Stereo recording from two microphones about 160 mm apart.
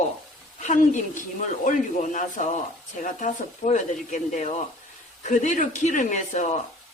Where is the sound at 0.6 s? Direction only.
50° left (ahead or behind).